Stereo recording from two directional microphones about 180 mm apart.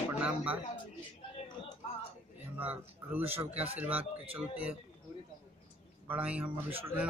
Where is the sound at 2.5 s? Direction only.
10° right (ahead or behind).